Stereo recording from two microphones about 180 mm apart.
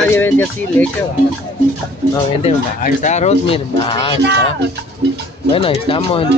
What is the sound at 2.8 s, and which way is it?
Speech, 40° left (ahead or behind).